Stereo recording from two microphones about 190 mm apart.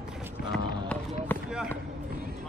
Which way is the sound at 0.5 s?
5° left (ahead or behind).